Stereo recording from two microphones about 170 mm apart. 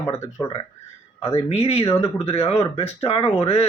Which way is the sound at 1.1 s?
35° left (ahead or behind).